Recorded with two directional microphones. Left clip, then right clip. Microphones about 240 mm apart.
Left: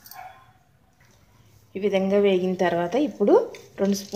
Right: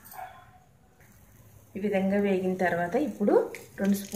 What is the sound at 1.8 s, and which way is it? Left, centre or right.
A woman's voice, left.